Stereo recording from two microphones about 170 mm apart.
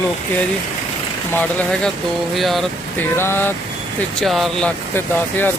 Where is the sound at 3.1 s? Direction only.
15° left (ahead or behind).